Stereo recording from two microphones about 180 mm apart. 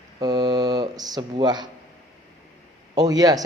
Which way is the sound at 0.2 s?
25° right (ahead or behind).